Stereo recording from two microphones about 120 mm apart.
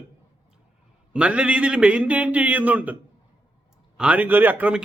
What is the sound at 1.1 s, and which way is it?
A man's voice, 10° right (ahead or behind).